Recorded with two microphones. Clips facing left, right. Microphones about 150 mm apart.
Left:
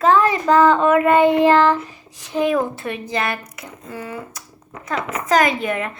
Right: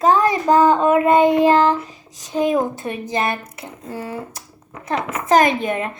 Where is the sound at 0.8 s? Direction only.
35° right (ahead or behind).